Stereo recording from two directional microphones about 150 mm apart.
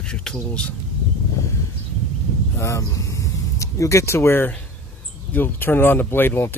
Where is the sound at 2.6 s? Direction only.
20° left (ahead or behind).